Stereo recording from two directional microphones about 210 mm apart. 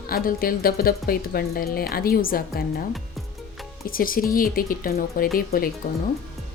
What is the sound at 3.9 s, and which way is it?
A woman's voice, 40° left (ahead or behind).